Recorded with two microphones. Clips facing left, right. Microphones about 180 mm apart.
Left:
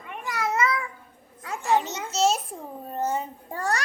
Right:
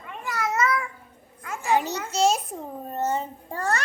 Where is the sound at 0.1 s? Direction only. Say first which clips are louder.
Even; 15° left (ahead or behind).